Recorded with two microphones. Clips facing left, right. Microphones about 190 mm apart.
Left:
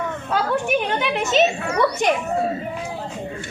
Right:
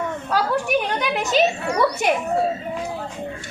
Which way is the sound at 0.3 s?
Centre (ahead or behind).